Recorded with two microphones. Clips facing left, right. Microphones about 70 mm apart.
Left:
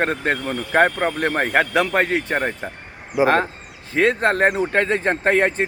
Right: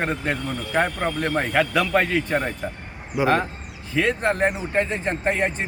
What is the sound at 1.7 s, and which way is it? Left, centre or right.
Speech, left.